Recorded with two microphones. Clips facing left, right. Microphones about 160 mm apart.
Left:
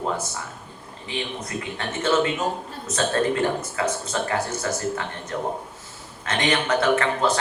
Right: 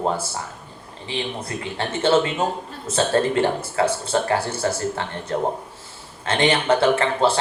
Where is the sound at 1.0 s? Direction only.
30° right (ahead or behind).